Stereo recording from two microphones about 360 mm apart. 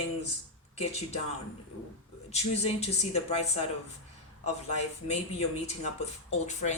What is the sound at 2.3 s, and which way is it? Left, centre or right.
Speech, centre.